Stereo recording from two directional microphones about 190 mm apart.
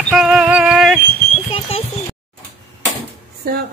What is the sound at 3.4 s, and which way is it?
Speech, 55° right (ahead or behind).